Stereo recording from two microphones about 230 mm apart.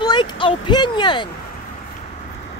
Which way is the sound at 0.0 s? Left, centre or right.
Centre.